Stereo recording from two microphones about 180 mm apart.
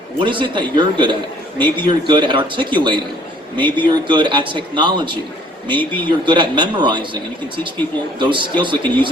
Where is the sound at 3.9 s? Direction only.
25° right (ahead or behind).